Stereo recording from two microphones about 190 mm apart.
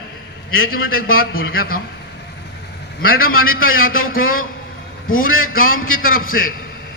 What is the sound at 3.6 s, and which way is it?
Speech, 90° left.